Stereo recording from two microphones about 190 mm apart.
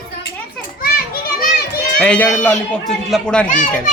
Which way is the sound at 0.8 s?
50° left (ahead or behind).